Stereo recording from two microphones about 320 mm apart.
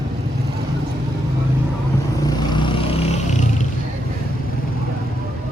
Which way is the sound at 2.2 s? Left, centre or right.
Centre.